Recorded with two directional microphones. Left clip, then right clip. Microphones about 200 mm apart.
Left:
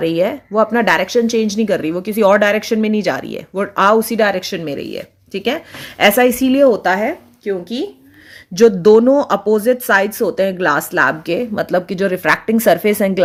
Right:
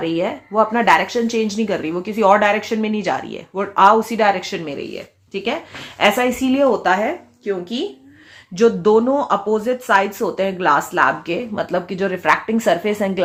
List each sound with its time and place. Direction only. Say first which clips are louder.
0.0 s speech: left 5 dB; 50° left (ahead or behind)